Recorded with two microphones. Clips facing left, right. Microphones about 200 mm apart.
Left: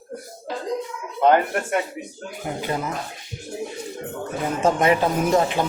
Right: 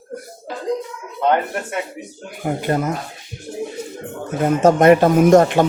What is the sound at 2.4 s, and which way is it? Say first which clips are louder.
Speech: right 7 dB; 50° right (ahead or behind).